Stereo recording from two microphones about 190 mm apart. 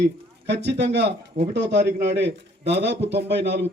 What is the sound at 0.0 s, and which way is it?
Speech, 60° right (ahead or behind).